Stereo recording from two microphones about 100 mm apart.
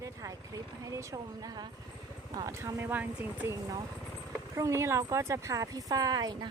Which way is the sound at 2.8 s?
20° right (ahead or behind).